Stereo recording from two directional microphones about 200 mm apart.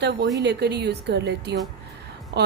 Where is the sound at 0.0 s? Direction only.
55° right (ahead or behind).